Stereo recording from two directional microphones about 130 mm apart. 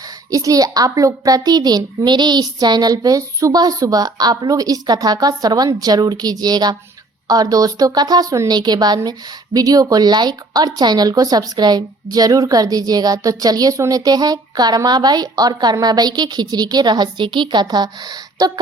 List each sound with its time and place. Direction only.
0.3 s a child's voice: 25° right (ahead or behind)